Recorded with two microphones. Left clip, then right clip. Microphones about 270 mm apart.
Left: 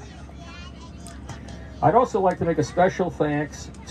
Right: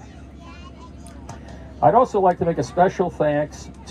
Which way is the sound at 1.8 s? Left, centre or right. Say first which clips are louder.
Right 3 dB; right.